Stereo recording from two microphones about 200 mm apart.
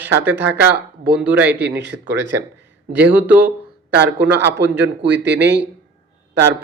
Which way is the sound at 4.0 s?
60° right (ahead or behind).